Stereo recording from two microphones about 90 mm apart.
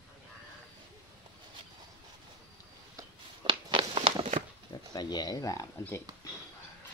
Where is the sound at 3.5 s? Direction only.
75° right (ahead or behind).